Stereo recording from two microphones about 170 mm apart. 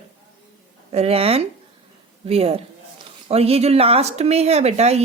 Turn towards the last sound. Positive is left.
turn(degrees=-40)  # may be behind; listen again after turning